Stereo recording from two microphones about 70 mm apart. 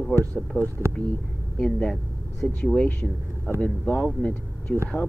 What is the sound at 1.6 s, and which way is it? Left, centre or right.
Speech, centre.